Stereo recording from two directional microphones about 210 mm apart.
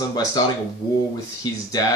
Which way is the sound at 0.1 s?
20° left (ahead or behind).